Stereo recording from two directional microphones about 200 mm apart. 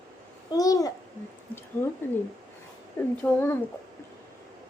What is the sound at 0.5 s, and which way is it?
Speech, 15° left (ahead or behind).